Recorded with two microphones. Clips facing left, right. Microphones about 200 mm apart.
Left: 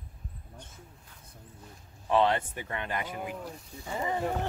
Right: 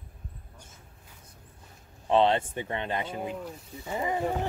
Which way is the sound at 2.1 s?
25° right (ahead or behind).